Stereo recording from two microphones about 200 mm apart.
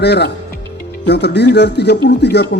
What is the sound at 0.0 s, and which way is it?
Speech, 55° left (ahead or behind).